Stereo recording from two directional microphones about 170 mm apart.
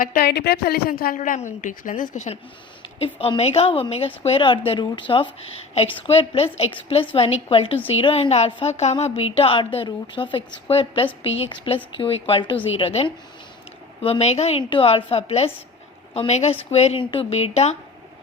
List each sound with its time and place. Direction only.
0.0 s a woman's voice: 60° left (ahead or behind); by 17.7 s 40° left (ahead or behind)